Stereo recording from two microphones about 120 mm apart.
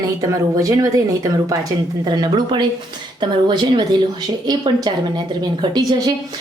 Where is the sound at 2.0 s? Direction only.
35° right (ahead or behind).